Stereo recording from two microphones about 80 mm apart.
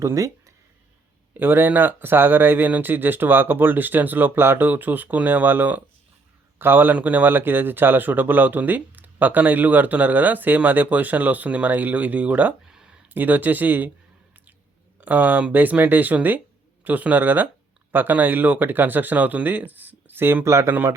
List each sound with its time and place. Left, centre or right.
0.0 s speech: right
1.3 s a man's voice: right; by 13.0 s centre
13.1 s a man's voice: right
15.0 s a man's voice: centre; by 20.7 s right